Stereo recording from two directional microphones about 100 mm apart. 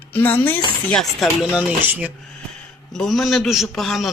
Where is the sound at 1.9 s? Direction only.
15° right (ahead or behind).